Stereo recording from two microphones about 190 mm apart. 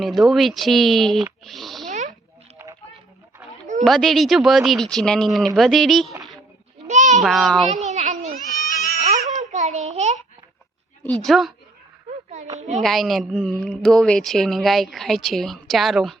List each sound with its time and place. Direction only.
0.0 s a woman's voice: centre (ahead or behind)
1.9 s a sound: 40° right (ahead or behind)
3.8 s a woman's voice: centre (ahead or behind)
6.8 s a sound: 40° right (ahead or behind)
7.2 s a woman's voice: centre (ahead or behind)
7.9 s a sound: 35° right (ahead or behind)
11.0 s a woman's voice: 5° left (ahead or behind)
12.5 s a child's voice: 40° right (ahead or behind)
12.8 s a woman's voice: centre (ahead or behind)